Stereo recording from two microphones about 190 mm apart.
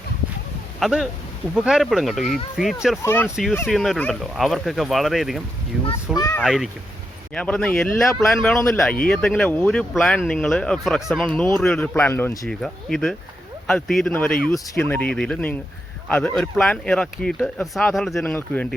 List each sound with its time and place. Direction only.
0.8 s speech: 5° right (ahead or behind)
3.0 s speech: 10° left (ahead or behind)
3.2 s speech: centre (ahead or behind)
6.1 s a sound: 15° left (ahead or behind)
6.4 s speech: centre (ahead or behind); by 12.5 s 15° left (ahead or behind)
12.5 s speech: centre (ahead or behind)